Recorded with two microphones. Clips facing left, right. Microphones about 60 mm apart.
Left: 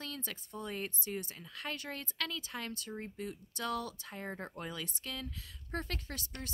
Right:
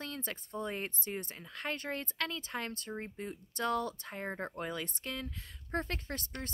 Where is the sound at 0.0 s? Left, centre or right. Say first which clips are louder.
Right 2 dB; right.